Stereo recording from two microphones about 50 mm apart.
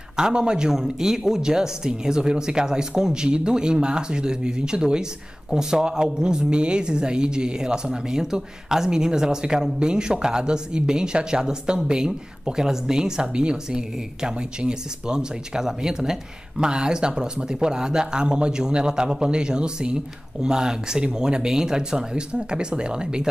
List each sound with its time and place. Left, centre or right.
0.1 s a woman's voice: centre